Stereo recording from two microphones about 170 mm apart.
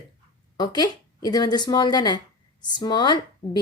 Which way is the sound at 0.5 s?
25° left (ahead or behind).